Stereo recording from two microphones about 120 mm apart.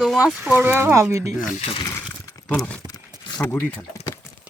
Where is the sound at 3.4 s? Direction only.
15° left (ahead or behind).